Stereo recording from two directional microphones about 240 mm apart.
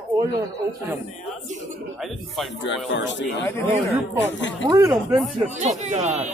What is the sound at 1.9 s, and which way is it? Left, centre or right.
Speech, centre.